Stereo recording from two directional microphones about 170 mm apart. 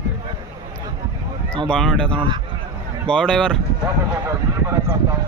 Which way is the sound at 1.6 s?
5° left (ahead or behind).